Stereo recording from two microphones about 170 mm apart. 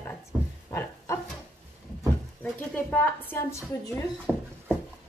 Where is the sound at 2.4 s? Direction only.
10° left (ahead or behind).